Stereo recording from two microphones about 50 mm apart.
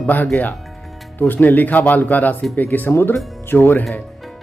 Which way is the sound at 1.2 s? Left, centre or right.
Left.